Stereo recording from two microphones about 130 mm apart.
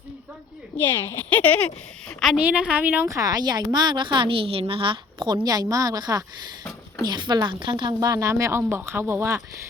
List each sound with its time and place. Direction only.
0.8 s speech: 15° left (ahead or behind)
2.4 s a woman's voice: 10° right (ahead or behind)